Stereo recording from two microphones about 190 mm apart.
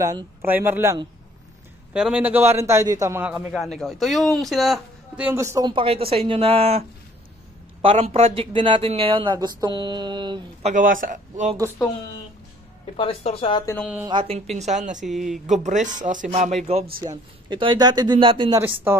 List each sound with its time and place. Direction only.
0.0 s a man's voice: 20° right (ahead or behind)
2.0 s a man's voice: 5° right (ahead or behind); by 10.4 s 25° right (ahead or behind)
10.6 s a man's voice: 40° right (ahead or behind)
12.9 s speech: 30° left (ahead or behind)
13.7 s speech: 5° right (ahead or behind)
14.0 s speech: 30° right (ahead or behind)
14.6 s a man's voice: 40° right (ahead or behind)
15.0 s speech: centre (ahead or behind)
15.4 s a man's voice: 40° right (ahead or behind)
17.5 s speech: 25° right (ahead or behind)
18.9 s a man's voice: 10° right (ahead or behind)